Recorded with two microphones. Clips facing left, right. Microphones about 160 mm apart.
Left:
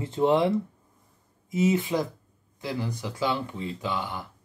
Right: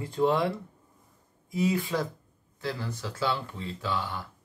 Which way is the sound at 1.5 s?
20° left (ahead or behind).